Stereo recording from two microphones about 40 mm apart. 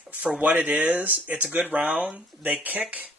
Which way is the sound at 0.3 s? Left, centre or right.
Right.